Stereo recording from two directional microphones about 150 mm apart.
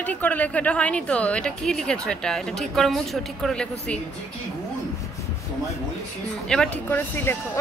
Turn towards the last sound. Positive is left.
turn(degrees=15)  # may be behind; listen again after turning